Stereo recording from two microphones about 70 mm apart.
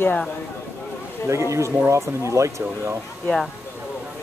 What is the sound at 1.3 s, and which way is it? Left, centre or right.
Speech, right.